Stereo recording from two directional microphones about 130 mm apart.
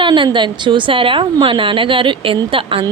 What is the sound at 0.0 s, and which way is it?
A woman's voice, 35° right (ahead or behind).